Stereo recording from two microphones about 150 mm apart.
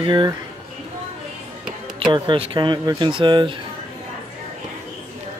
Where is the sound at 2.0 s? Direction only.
30° right (ahead or behind).